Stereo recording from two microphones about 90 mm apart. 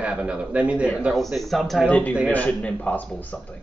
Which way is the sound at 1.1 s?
Centre (ahead or behind).